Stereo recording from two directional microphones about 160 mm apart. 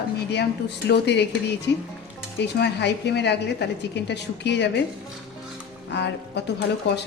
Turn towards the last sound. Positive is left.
turn(degrees=90)